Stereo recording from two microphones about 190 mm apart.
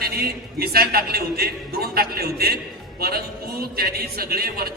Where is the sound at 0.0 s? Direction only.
55° right (ahead or behind).